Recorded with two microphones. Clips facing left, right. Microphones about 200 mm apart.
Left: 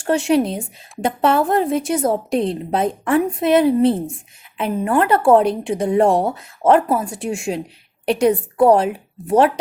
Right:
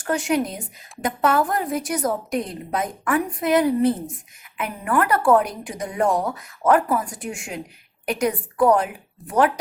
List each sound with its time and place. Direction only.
0.0 s a woman's voice: 25° left (ahead or behind)